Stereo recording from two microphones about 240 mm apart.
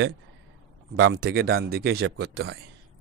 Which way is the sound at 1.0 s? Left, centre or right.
Right.